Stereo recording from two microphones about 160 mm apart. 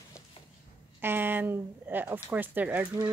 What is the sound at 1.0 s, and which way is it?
Speech, 15° right (ahead or behind).